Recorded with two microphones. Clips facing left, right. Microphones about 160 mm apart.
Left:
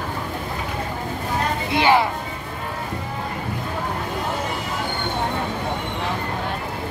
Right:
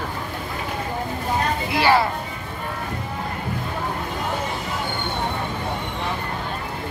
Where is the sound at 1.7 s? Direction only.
20° left (ahead or behind).